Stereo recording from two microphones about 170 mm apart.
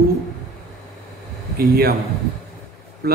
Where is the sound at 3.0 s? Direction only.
70° right (ahead or behind).